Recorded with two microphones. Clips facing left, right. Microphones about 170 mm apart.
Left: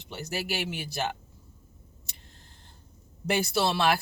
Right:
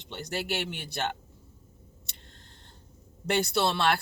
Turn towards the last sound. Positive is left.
turn(degrees=5)  # may be behind; listen again after turning